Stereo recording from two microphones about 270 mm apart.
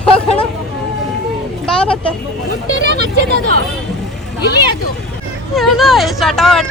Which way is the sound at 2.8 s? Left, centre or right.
Right.